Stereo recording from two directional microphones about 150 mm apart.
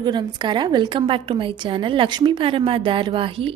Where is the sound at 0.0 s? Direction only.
30° right (ahead or behind).